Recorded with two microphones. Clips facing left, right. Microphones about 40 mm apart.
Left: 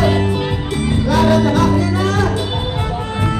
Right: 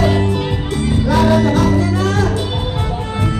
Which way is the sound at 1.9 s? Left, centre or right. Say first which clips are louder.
Even; left.